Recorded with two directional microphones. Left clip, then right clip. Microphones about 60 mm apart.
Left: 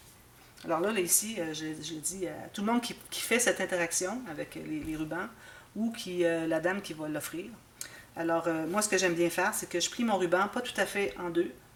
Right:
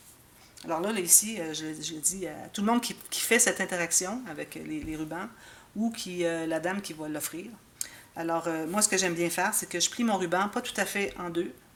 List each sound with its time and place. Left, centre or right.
0.6 s speech: right